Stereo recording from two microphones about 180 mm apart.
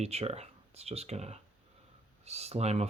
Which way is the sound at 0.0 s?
35° right (ahead or behind).